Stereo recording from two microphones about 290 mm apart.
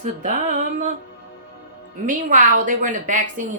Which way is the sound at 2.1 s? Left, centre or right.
Right.